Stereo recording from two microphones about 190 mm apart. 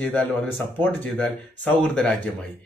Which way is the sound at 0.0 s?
10° left (ahead or behind).